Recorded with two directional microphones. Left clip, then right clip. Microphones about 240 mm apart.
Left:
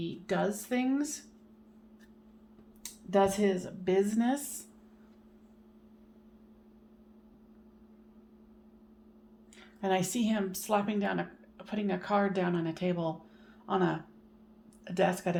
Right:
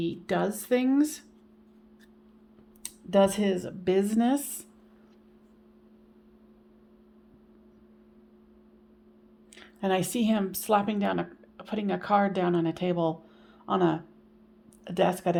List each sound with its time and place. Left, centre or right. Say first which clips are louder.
0.0 s speech: right 4 dB; right
2.8 s speech: right 4 dB; right
9.6 s speech: right 3 dB; right